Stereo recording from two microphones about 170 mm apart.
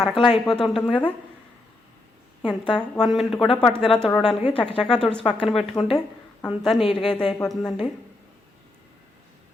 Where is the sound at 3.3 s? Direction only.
30° left (ahead or behind).